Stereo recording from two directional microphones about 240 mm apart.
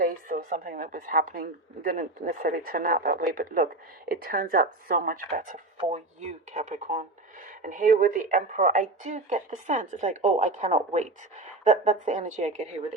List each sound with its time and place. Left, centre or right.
0.0 s a woman's voice: right